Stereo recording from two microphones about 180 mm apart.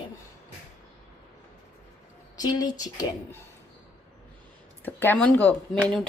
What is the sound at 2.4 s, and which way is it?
Speech, 20° left (ahead or behind).